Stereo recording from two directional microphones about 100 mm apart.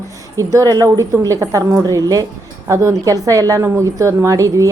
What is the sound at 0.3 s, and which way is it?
A woman's voice, 35° right (ahead or behind).